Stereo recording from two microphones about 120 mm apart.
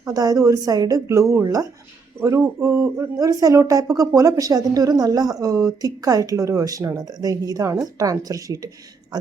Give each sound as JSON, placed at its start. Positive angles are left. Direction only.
{"t": 0.0, "sound": "speech", "side_deg": -30}